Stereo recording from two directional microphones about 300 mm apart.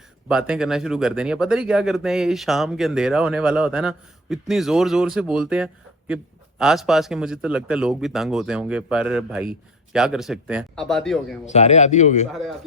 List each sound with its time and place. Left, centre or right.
0.3 s speech: centre
11.4 s speech: left
12.3 s speech: centre